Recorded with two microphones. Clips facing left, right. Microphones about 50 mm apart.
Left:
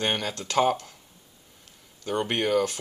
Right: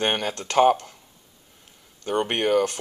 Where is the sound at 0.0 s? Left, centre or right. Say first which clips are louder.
Right 3 dB; centre.